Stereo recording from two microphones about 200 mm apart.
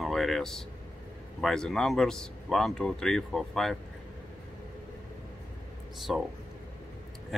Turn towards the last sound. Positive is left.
turn(degrees=0)  # may be behind; listen again after turning